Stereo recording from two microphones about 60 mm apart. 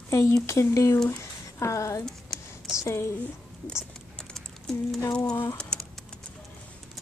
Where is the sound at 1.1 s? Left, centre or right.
Left.